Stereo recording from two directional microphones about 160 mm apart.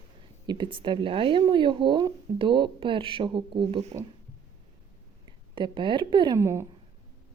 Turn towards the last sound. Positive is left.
turn(degrees=-15)  # may be behind; listen again after turning